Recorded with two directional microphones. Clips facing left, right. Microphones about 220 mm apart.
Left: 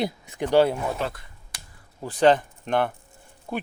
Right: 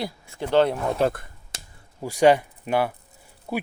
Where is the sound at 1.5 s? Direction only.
25° right (ahead or behind).